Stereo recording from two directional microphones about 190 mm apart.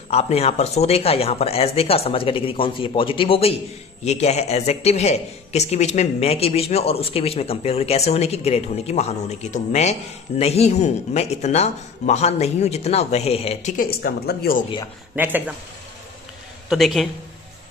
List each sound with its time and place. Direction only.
0.1 s a man's voice: 35° left (ahead or behind)
13.8 s a woman's voice: 55° left (ahead or behind)
15.1 s speech: 10° right (ahead or behind)
16.6 s a man's voice: centre (ahead or behind)